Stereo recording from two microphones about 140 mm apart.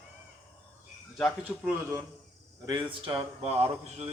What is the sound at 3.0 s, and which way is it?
Speech, 45° right (ahead or behind).